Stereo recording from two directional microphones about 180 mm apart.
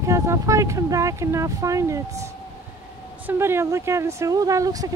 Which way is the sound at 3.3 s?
15° right (ahead or behind).